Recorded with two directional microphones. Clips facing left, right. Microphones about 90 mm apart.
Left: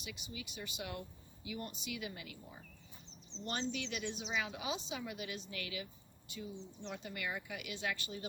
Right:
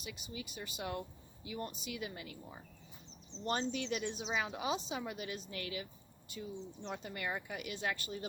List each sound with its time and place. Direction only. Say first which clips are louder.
0.0 s a woman's voice: right 2 dB; 40° right (ahead or behind)
3.4 s a woman's voice: right 4 dB; 35° right (ahead or behind)